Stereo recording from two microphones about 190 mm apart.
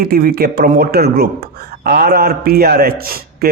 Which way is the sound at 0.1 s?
50° right (ahead or behind).